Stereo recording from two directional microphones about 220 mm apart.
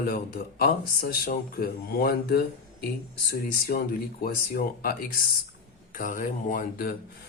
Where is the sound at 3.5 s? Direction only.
45° left (ahead or behind).